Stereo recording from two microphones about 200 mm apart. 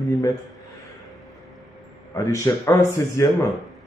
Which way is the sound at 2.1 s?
15° left (ahead or behind).